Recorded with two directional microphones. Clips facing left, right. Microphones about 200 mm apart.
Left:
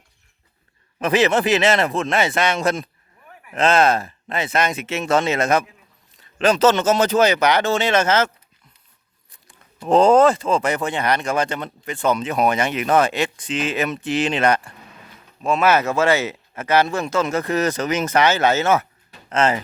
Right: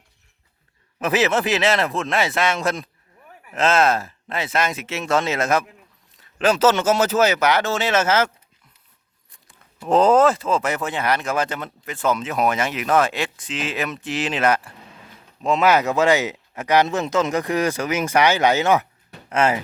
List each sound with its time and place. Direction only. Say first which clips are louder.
0.9 s speech: left 2 dB; 5° right (ahead or behind)
9.3 s speech: left 2 dB; centre (ahead or behind)
15.4 s speech: even; 20° right (ahead or behind)